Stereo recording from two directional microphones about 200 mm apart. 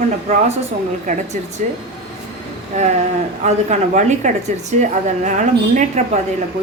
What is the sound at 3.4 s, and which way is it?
A woman's voice, 35° right (ahead or behind).